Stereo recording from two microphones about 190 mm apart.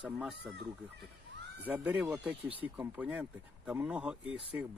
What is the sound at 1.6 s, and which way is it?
Speech, 10° right (ahead or behind).